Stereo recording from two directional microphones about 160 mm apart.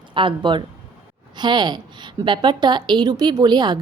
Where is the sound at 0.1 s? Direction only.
30° right (ahead or behind).